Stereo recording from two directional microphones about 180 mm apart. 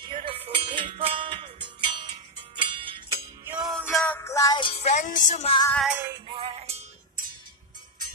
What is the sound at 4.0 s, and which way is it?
Music, 10° left (ahead or behind).